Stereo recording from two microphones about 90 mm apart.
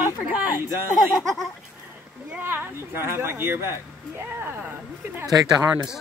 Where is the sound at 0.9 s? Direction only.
Centre (ahead or behind).